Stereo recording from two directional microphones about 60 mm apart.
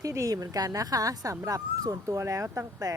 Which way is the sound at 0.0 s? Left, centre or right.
Right.